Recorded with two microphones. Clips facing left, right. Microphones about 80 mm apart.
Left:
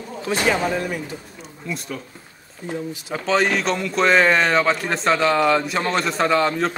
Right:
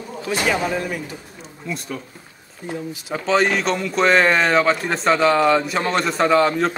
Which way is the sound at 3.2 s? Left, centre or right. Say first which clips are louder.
Right 1 dB; centre.